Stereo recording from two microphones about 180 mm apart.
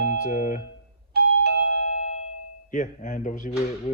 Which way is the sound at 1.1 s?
60° right (ahead or behind).